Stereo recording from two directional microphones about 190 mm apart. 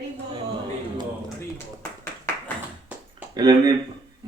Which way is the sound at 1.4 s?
10° left (ahead or behind).